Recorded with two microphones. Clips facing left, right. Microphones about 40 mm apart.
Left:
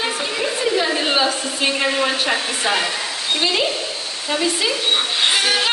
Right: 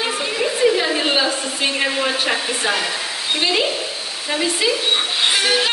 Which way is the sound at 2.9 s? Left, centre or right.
Centre.